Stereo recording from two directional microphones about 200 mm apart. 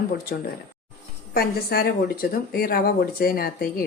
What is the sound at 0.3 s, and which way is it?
A woman's voice, 50° left (ahead or behind).